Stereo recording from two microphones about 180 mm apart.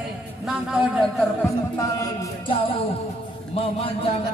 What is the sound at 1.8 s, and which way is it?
Speech, 20° left (ahead or behind).